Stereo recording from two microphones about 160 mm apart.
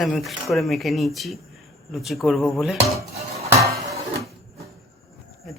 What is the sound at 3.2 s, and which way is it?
Dishes, 40° right (ahead or behind).